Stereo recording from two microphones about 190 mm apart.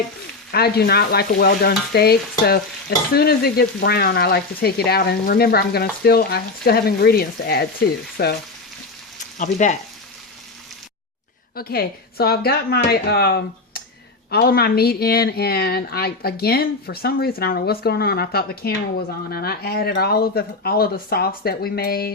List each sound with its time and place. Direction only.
0.5 s speech: 55° left (ahead or behind)
3.2 s speech: 55° left (ahead or behind)
9.4 s speech: 40° left (ahead or behind)
11.5 s speech: 55° left (ahead or behind)